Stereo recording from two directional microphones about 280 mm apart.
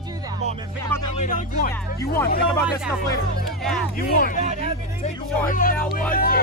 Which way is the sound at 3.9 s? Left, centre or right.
Left.